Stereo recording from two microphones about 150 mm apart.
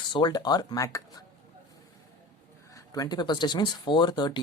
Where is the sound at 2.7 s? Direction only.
20° left (ahead or behind).